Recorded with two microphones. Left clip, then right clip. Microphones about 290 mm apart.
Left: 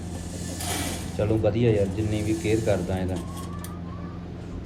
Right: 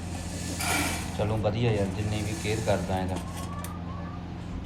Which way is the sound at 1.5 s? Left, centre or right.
Centre.